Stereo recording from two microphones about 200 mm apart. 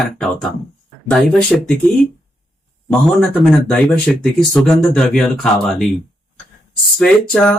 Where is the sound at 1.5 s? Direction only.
Centre (ahead or behind).